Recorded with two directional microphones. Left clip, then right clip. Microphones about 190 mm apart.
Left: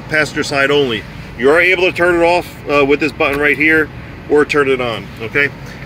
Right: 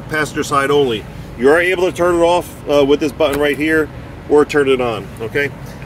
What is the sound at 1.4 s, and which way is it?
Speech, 15° right (ahead or behind).